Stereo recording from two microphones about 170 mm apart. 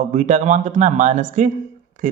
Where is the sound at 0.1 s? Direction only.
45° right (ahead or behind).